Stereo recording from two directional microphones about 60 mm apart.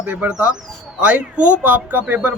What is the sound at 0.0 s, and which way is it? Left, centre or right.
Speech, right.